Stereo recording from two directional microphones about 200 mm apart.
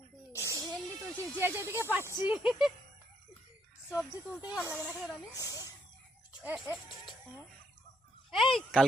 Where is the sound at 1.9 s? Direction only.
15° right (ahead or behind).